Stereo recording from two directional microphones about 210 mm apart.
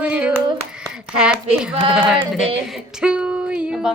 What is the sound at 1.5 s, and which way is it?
Speech, 5° right (ahead or behind).